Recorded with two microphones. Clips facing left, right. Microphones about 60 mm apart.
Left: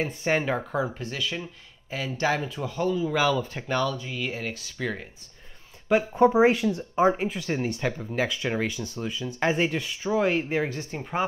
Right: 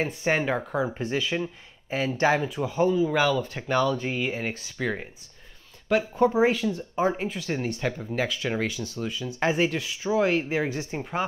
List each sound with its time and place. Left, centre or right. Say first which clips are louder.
0.0 s speech: even; centre
0.9 s speech: right 5 dB; right
2.4 s speech: right 4 dB; centre
4.2 s speech: right 2 dB; centre
5.9 s speech: left 2 dB; centre
10.7 s speech: right 3 dB; centre